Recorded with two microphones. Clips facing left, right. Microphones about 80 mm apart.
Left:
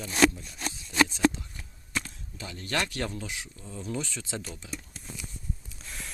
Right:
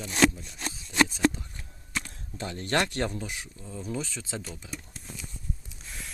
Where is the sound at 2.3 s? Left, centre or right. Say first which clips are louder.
Right 4 dB; right.